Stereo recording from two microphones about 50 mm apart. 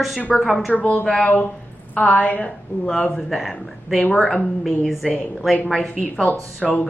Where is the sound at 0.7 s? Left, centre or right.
Left.